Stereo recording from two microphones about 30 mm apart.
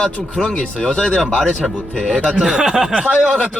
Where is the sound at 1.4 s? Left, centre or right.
Left.